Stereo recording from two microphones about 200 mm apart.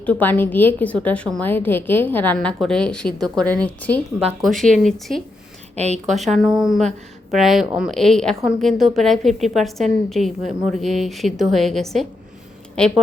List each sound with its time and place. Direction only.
0.0 s a woman's voice: 10° left (ahead or behind)
5.7 s a woman's voice: 35° right (ahead or behind)
6.1 s a woman's voice: centre (ahead or behind)